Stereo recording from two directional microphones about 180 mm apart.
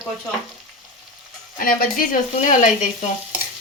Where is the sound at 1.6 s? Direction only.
50° left (ahead or behind).